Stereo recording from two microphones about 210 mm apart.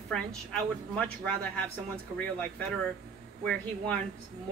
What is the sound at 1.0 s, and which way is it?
Speech, 5° left (ahead or behind).